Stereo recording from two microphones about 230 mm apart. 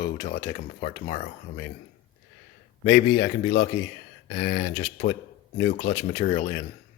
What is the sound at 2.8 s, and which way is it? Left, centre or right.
A man's voice, left.